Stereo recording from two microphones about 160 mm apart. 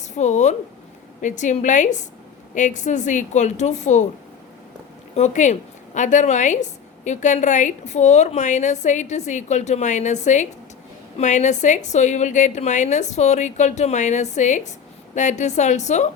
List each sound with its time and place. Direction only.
0.2 s a woman's voice: 45° left (ahead or behind)
5.1 s a woman's voice: 50° left (ahead or behind)